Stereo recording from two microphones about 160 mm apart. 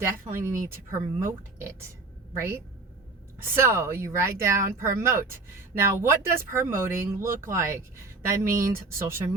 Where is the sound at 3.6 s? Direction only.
15° right (ahead or behind).